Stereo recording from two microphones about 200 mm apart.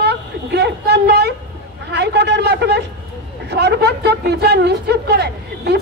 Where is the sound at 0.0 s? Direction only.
55° right (ahead or behind).